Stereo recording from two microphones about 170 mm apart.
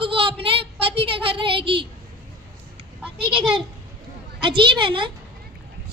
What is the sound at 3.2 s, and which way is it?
A woman's voice, 30° right (ahead or behind).